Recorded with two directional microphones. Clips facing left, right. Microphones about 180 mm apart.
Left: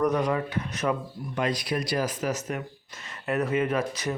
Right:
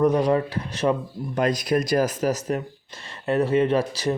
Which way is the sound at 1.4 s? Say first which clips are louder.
Right 6 dB; 45° right (ahead or behind).